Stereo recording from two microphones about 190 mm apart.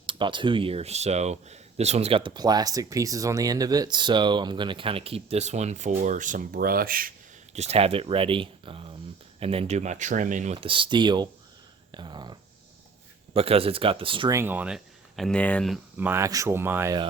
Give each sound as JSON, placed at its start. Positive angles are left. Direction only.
{"t": 0.0, "sound": "speech", "side_deg": -25}
{"t": 7.5, "sound": "speech", "side_deg": -35}
{"t": 14.3, "sound": "speech", "side_deg": -10}
{"t": 16.0, "sound": "speech", "side_deg": -10}